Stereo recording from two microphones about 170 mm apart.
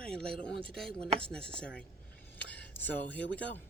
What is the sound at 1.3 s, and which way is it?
Speech, 5° left (ahead or behind).